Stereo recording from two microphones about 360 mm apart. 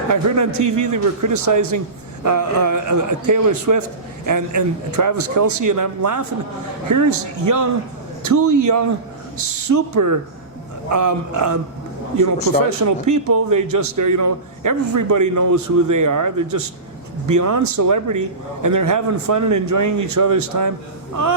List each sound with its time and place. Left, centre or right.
0.1 s a man's voice: right